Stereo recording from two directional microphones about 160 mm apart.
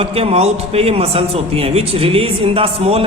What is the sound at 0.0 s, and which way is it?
A man's voice, 40° right (ahead or behind).